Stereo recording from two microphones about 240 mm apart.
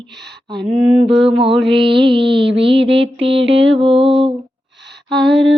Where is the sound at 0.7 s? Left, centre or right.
Right.